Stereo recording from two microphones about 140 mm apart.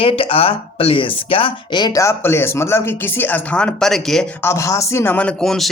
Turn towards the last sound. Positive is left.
turn(degrees=0)  # may be behind; listen again after turning